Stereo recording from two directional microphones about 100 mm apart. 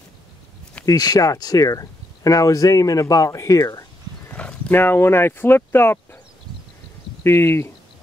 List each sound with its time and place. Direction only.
0.8 s speech: 40° left (ahead or behind)
4.3 s speech: 15° left (ahead or behind)
7.2 s speech: 25° left (ahead or behind)